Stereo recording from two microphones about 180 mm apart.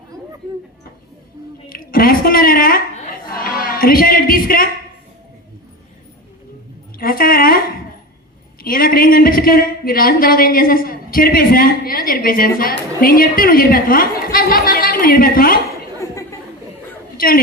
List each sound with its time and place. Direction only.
1.7 s a woman's voice: 55° left (ahead or behind)
3.2 s a sound: 55° left (ahead or behind)
7.0 s a sound: 55° left (ahead or behind)
8.6 s a woman's voice: 55° left (ahead or behind)
16.0 s chatter: 15° left (ahead or behind)
17.2 s a woman's voice: 55° left (ahead or behind)